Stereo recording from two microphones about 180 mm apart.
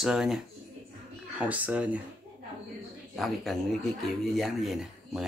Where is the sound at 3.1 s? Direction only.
Centre (ahead or behind).